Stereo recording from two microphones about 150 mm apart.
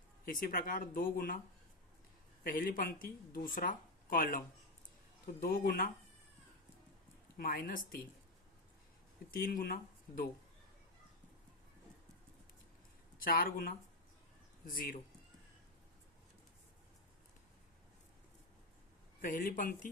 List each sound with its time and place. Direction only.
0.3 s speech: 70° left (ahead or behind)
2.4 s speech: 75° left (ahead or behind)
5.4 s speech: 75° left (ahead or behind)
7.3 s speech: 80° left
9.3 s speech: 70° left (ahead or behind)
13.1 s speech: 75° left (ahead or behind)
19.2 s speech: 65° left (ahead or behind)